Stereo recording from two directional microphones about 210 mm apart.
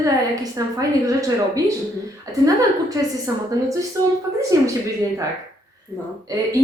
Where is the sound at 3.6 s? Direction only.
15° right (ahead or behind).